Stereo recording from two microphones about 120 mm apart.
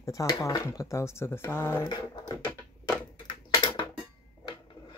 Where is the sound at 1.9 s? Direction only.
35° left (ahead or behind).